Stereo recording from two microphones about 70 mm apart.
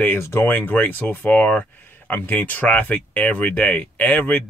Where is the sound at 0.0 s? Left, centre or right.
Left.